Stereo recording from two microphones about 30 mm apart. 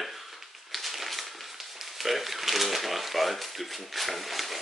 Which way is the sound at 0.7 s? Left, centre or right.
Centre.